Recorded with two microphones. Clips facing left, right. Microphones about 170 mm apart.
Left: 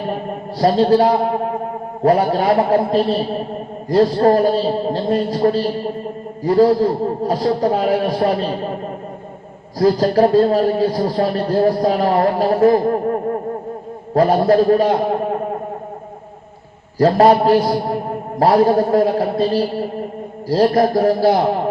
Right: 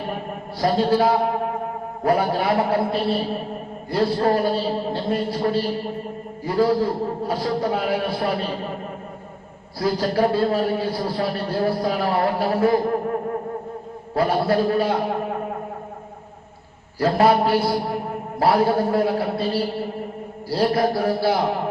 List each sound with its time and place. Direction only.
0.6 s a man's voice: 40° left (ahead or behind)
9.7 s a man's voice: 40° left (ahead or behind)
17.0 s a man's voice: 40° left (ahead or behind)